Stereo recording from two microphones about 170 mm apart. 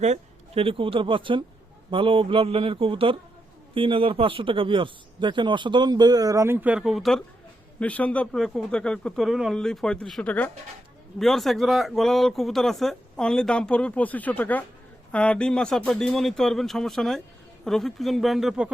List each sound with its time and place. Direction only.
0.0 s speech: 40° right (ahead or behind); by 18.7 s 5° right (ahead or behind)